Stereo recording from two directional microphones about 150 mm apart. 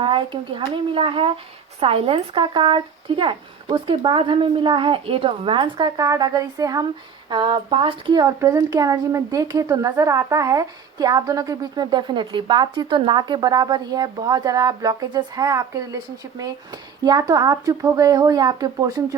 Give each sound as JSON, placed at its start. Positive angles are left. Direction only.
{"t": 0.0, "sound": "a woman's voice", "side_deg": -35}
{"t": 17.0, "sound": "a woman's voice", "side_deg": -25}